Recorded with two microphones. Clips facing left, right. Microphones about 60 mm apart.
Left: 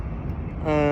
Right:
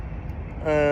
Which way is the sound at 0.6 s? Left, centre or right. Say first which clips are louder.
Right 1 dB; centre.